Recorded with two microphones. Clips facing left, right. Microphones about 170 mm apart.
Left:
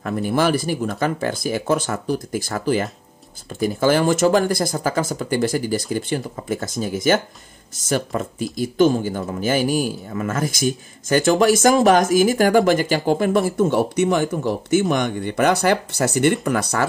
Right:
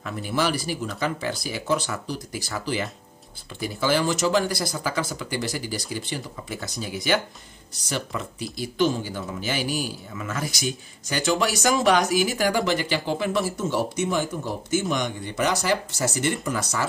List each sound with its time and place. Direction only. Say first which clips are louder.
0.0 s speech: left 6 dB; 50° left (ahead or behind)